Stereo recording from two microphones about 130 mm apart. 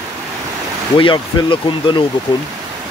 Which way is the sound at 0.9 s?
40° left (ahead or behind).